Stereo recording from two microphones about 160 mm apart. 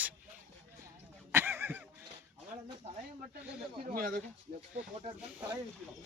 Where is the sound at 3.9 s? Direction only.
65° right (ahead or behind).